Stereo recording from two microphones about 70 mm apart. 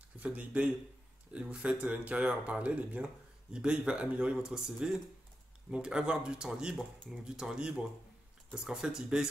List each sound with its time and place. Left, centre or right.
0.2 s speech: right